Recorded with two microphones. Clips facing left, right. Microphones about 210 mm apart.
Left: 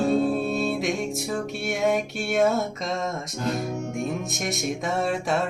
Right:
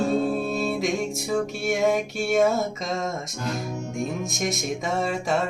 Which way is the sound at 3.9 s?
Centre (ahead or behind).